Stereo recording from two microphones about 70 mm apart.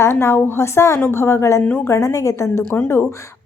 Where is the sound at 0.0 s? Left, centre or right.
Left.